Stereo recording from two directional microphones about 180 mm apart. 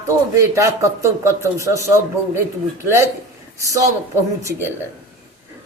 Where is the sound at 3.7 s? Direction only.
15° right (ahead or behind).